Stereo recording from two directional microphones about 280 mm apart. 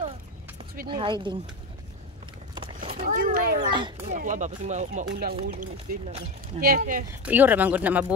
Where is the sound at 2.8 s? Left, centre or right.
Right.